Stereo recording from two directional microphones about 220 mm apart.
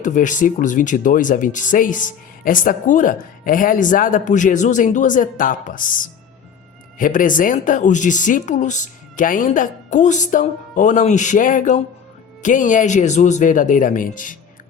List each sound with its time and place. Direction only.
0.0 s speech: 35° left (ahead or behind)